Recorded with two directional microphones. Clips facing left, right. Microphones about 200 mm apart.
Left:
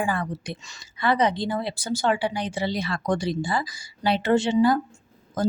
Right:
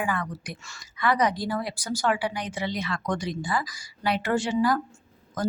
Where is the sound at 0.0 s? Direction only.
30° left (ahead or behind).